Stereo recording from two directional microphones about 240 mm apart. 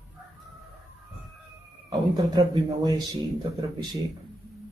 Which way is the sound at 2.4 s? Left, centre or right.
Centre.